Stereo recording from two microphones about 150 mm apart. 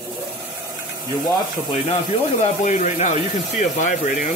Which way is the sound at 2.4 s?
50° left (ahead or behind).